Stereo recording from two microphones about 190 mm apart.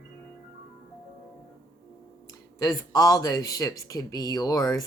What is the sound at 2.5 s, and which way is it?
Speech, 20° left (ahead or behind).